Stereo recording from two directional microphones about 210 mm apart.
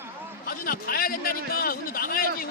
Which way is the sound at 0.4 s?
45° left (ahead or behind).